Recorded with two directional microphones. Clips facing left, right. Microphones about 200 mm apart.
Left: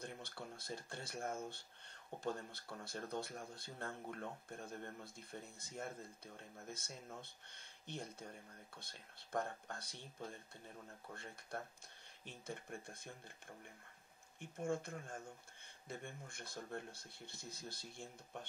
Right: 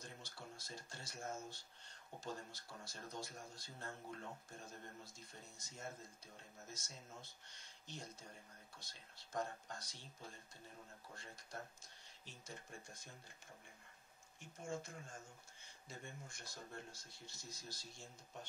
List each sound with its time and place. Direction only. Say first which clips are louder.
0.0 s speech: left 5 dB; 60° left (ahead or behind)
11.5 s speech: left 5 dB; 60° left (ahead or behind)
14.4 s speech: left 6 dB; 55° left (ahead or behind)